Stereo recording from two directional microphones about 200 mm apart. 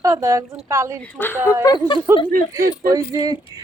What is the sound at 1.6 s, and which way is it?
Speech, 20° left (ahead or behind).